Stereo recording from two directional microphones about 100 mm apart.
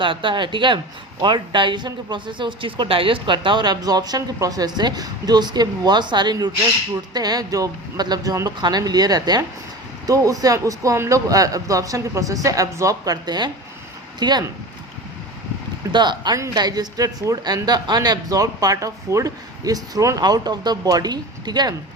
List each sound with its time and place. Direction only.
0.0 s speech: 55° right (ahead or behind)
15.9 s speech: 50° right (ahead or behind)